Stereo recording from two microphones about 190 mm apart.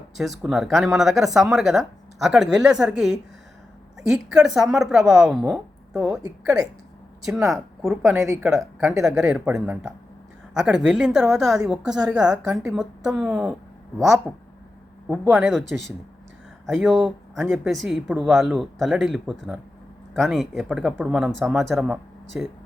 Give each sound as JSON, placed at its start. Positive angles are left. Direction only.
{"t": 0.2, "sound": "a woman's voice", "side_deg": 0}